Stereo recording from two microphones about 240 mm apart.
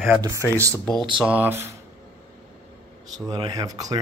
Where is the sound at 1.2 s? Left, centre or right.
Centre.